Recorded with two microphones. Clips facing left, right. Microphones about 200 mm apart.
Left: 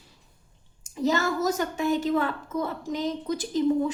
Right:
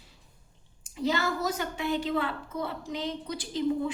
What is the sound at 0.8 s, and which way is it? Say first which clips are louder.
Speech: left 4 dB; 45° left (ahead or behind).